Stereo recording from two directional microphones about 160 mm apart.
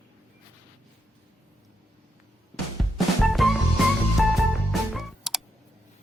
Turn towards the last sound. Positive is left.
turn(degrees=0)  # may be behind; listen again after turning